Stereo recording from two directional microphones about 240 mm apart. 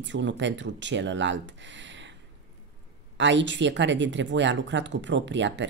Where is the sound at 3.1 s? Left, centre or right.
Right.